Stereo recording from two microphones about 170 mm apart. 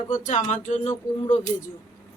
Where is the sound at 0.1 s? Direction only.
45° left (ahead or behind).